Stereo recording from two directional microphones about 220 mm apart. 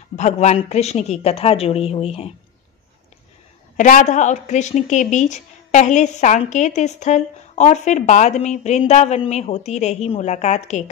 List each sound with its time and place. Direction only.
0.1 s a woman's voice: 30° left (ahead or behind)
3.7 s a woman's voice: 35° left (ahead or behind)